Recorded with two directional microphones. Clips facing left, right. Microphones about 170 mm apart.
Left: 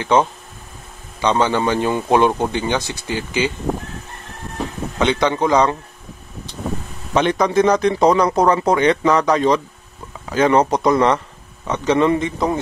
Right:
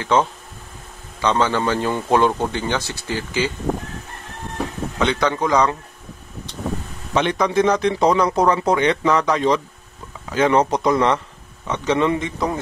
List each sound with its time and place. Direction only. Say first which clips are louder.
0.0 s a man's voice: left 2 dB; 15° left (ahead or behind)
4.9 s a man's voice: left 3 dB; 20° left (ahead or behind)
7.2 s a man's voice: left 2 dB; 40° left (ahead or behind)